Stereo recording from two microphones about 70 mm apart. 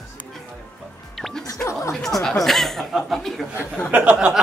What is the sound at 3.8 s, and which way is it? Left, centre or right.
Speech, right.